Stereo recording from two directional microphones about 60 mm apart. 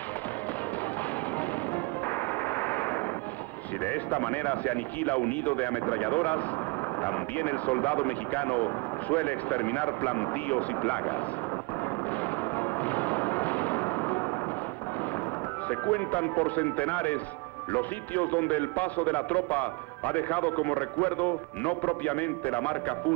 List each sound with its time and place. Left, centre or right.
1.4 s music: left
3.8 s speech: left
12.1 s artillery fire: left
15.7 s speech: left